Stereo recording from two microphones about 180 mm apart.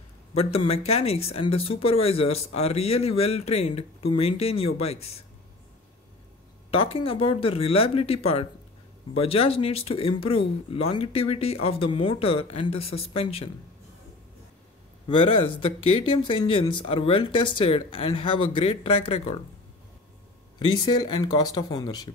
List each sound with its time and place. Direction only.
0.3 s speech: 35° left (ahead or behind)
6.7 s speech: 30° left (ahead or behind)
15.0 s speech: 30° left (ahead or behind)
20.5 s speech: 25° left (ahead or behind)